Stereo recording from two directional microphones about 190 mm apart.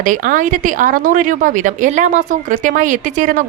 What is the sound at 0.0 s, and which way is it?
Speech, 45° right (ahead or behind).